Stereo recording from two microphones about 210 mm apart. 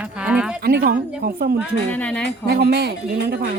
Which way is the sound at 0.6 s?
45° right (ahead or behind).